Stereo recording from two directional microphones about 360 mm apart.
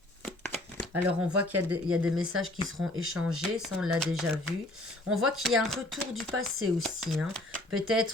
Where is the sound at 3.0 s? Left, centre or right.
Right.